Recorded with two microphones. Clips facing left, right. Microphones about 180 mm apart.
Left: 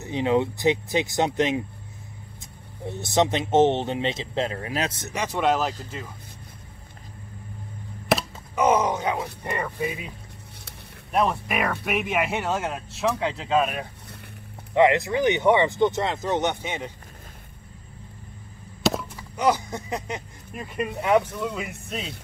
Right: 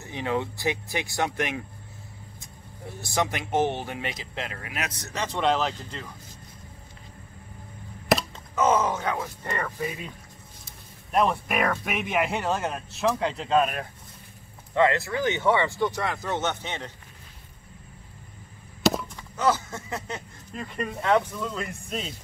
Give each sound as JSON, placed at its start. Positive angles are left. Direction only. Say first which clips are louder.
{"t": 0.0, "sound": "speech", "louder": "left 6 dB", "side_deg": 20}
{"t": 2.9, "sound": "speech", "louder": "left 6 dB", "side_deg": 25}
{"t": 5.1, "sound": "speech", "louder": "left 1 dB", "side_deg": 10}
{"t": 8.5, "sound": "speech", "louder": "left 2 dB", "side_deg": 15}
{"t": 14.7, "sound": "speech", "louder": "left 4 dB", "side_deg": 15}
{"t": 18.8, "sound": "chop", "louder": "right 1 dB", "side_deg": 0}
{"t": 19.3, "sound": "speech", "louder": "left 2 dB", "side_deg": 15}